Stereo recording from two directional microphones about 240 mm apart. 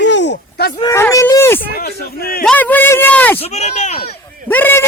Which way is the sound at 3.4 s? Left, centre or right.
Left.